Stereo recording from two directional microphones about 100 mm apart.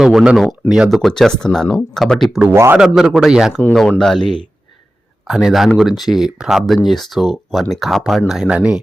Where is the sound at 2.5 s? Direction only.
25° right (ahead or behind).